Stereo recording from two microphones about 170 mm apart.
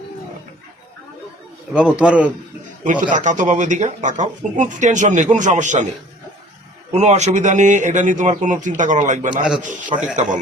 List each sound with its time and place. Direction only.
1.7 s a man's voice: 5° right (ahead or behind)
2.8 s speech: 45° right (ahead or behind)
6.9 s speech: 40° right (ahead or behind)